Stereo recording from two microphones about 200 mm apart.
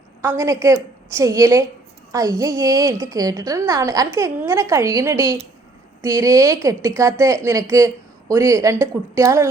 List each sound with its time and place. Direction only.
0.2 s a woman's voice: 15° right (ahead or behind)